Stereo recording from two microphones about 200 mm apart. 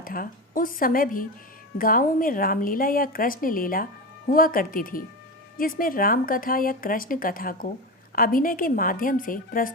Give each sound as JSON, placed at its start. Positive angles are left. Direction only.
{"t": 0.0, "sound": "speech", "side_deg": 45}